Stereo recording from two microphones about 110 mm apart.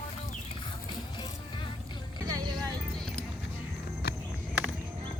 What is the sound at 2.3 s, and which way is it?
Music, 35° right (ahead or behind).